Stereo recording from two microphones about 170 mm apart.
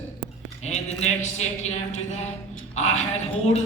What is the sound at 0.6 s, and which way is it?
Speech, 40° left (ahead or behind).